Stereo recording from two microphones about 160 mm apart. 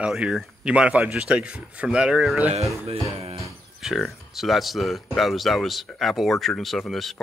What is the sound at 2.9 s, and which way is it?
Speech, 40° right (ahead or behind).